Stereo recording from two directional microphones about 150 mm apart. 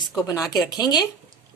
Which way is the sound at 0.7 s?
25° left (ahead or behind).